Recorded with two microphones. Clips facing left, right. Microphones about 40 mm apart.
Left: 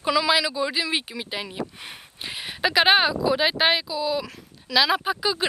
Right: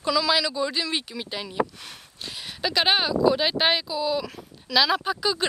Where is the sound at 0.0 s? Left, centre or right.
Centre.